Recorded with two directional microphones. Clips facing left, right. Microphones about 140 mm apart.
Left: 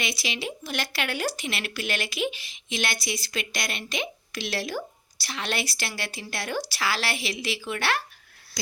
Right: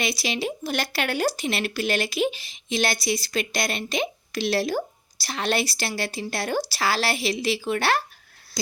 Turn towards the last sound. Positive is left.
turn(degrees=-35)  # may be behind; listen again after turning